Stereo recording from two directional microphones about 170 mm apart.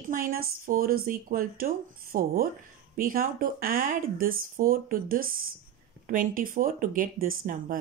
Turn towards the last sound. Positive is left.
turn(degrees=-55)  # may be behind; listen again after turning